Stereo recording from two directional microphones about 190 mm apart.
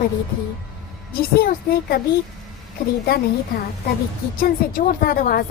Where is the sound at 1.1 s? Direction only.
50° left (ahead or behind).